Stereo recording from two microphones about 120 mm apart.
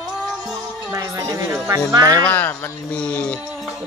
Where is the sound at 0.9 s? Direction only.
30° right (ahead or behind).